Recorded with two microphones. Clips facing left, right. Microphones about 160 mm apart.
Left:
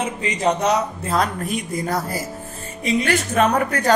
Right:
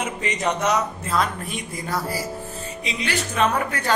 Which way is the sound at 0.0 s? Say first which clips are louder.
Left 4 dB; 30° left (ahead or behind).